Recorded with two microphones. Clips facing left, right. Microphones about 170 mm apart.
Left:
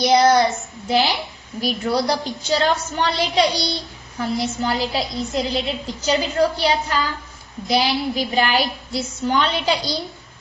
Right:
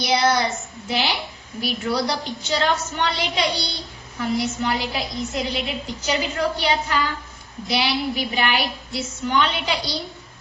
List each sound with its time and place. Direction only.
0.1 s child singing: 40° left (ahead or behind)
0.9 s a woman's voice: 40° left (ahead or behind)